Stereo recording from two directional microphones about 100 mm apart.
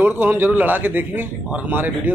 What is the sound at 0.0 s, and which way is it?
A man's voice, 15° right (ahead or behind).